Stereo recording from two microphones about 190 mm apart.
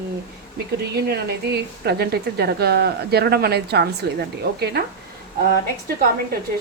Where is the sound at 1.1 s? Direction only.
60° right (ahead or behind).